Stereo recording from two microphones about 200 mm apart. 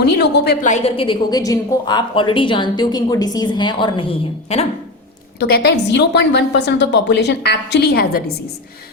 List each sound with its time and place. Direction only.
0.2 s a woman's voice: 55° left (ahead or behind)
0.6 s a woman's voice: 35° left (ahead or behind)
5.4 s a woman's voice: 55° left (ahead or behind)